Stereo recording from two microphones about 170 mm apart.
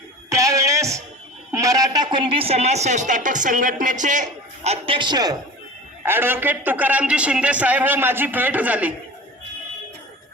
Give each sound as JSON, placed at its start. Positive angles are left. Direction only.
{"t": 0.3, "sound": "music", "side_deg": -20}
{"t": 1.5, "sound": "a man's voice", "side_deg": -20}
{"t": 6.0, "sound": "a man's voice", "side_deg": -10}